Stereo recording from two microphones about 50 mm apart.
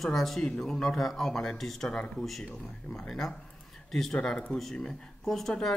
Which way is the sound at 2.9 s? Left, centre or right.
Centre.